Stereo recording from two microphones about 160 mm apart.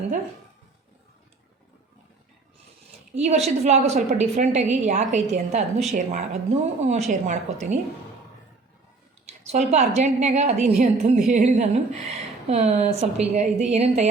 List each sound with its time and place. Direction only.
3.2 s a woman's voice: 45° right (ahead or behind)
9.2 s a woman's voice: 45° right (ahead or behind)